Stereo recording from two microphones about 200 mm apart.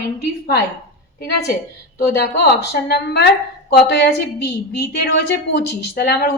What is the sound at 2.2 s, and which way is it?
A woman's voice, 55° left (ahead or behind).